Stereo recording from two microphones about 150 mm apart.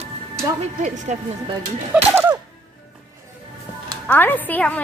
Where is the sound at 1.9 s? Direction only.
15° right (ahead or behind).